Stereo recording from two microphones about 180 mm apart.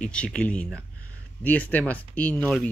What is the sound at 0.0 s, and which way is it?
Speech, 5° left (ahead or behind).